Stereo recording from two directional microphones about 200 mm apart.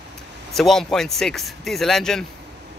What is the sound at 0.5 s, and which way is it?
Speech, centre (ahead or behind).